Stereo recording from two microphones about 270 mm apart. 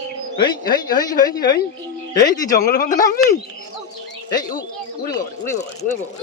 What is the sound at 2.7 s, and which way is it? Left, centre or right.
Speech, left.